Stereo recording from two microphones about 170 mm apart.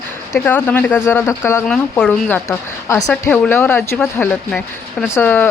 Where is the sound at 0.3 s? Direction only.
10° left (ahead or behind).